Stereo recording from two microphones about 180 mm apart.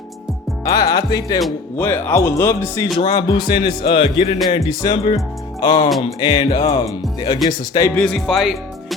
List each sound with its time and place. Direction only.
0.6 s speech: 20° left (ahead or behind)
7.9 s speech: 5° left (ahead or behind)